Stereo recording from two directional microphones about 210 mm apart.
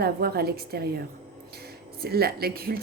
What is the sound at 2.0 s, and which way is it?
Speech, 50° right (ahead or behind).